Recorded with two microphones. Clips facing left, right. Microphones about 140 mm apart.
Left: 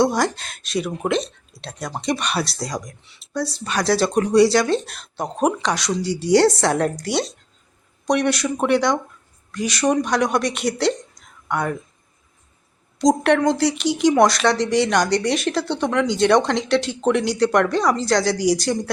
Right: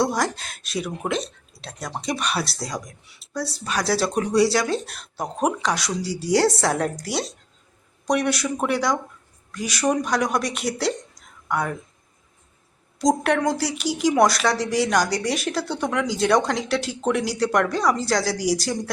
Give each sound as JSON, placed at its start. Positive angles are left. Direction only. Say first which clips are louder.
{"t": 0.0, "sound": "speech", "louder": "left 4 dB", "side_deg": 0}
{"t": 13.0, "sound": "speech", "louder": "left 4 dB", "side_deg": -5}